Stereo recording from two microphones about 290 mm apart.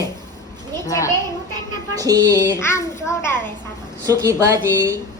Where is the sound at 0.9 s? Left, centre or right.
Centre.